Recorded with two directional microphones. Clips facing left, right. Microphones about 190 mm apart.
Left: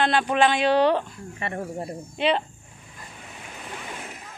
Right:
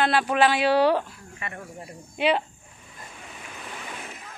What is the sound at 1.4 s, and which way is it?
Speech, 35° left (ahead or behind).